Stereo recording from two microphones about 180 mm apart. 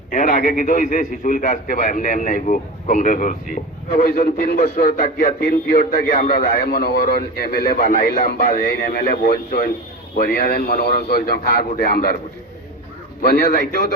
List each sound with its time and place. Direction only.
0.1 s a man's voice: 45° left (ahead or behind)
13.2 s a man's voice: 65° left (ahead or behind)